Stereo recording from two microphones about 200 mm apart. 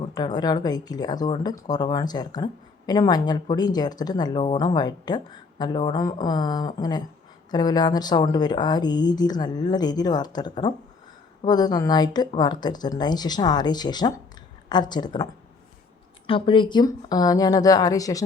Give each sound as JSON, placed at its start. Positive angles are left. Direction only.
{"t": 0.0, "sound": "speech", "side_deg": 20}